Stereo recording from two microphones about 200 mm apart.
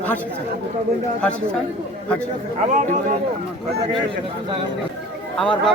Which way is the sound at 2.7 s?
40° right (ahead or behind).